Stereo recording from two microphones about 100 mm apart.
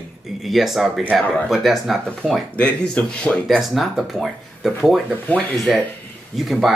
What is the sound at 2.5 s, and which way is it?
Speech, 10° left (ahead or behind).